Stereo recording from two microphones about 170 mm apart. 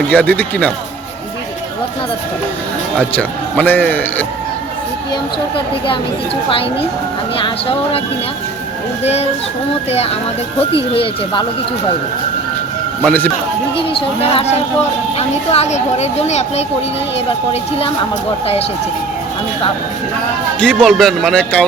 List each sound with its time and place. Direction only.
0.1 s a man's voice: 10° left (ahead or behind)
3.2 s a man's voice: 10° left (ahead or behind)
5.5 s speech: 30° left (ahead or behind)
9.9 s speech: 35° left (ahead or behind)
13.1 s a man's voice: 10° left (ahead or behind)
13.9 s speech: 35° left (ahead or behind)
20.6 s speech: 5° left (ahead or behind)